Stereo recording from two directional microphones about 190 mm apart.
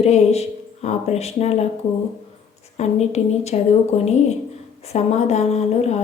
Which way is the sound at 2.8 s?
35° left (ahead or behind).